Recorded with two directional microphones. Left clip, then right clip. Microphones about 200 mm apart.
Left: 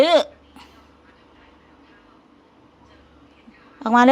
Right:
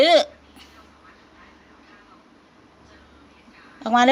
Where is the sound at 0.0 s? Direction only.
30° left (ahead or behind).